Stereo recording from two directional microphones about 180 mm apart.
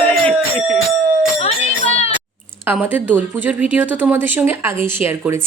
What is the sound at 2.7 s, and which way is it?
Speech, 10° right (ahead or behind).